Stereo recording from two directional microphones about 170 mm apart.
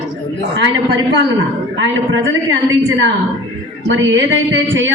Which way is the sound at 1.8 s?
90° right.